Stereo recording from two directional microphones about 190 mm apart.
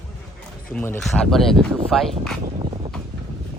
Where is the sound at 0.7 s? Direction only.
10° left (ahead or behind).